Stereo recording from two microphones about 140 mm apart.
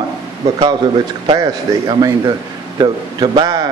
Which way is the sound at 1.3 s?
30° right (ahead or behind).